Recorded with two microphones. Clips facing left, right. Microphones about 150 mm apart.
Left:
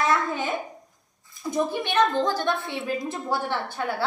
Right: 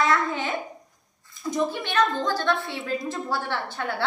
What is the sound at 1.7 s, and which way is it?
A woman's voice, 15° left (ahead or behind).